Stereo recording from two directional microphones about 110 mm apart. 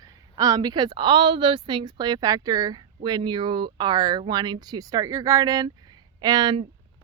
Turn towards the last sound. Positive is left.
turn(degrees=-40)  # may be behind; listen again after turning